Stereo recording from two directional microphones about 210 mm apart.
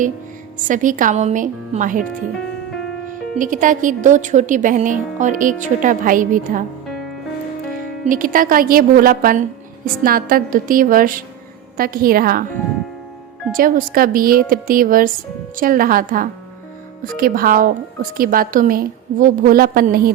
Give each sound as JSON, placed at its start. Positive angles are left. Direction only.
{"t": 0.5, "sound": "speech", "side_deg": -40}
{"t": 3.1, "sound": "speech", "side_deg": -40}
{"t": 8.0, "sound": "a woman's voice", "side_deg": -40}
{"t": 13.5, "sound": "a woman's voice", "side_deg": -40}